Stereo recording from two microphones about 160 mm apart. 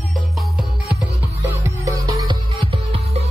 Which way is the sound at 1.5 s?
20° right (ahead or behind).